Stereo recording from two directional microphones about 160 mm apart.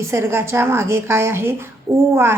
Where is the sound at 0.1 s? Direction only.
15° right (ahead or behind).